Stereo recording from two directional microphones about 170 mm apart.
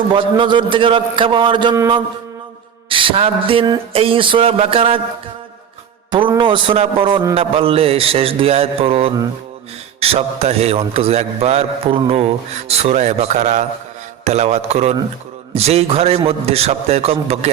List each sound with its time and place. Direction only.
0.1 s a man's voice: 30° right (ahead or behind)
6.1 s a man's voice: 30° right (ahead or behind)